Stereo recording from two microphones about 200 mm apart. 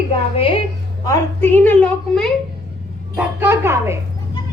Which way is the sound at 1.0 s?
15° left (ahead or behind).